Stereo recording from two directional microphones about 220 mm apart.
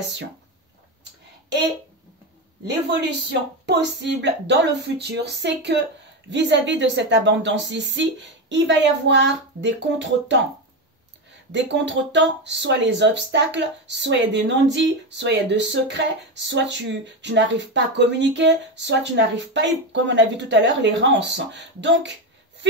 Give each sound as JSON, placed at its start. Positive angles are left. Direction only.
{"t": 2.6, "sound": "speech", "side_deg": -50}
{"t": 11.5, "sound": "speech", "side_deg": -55}